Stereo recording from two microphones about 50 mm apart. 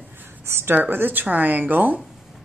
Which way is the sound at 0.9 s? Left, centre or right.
Right.